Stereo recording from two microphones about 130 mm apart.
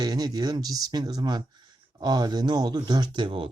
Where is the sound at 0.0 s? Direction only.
30° right (ahead or behind).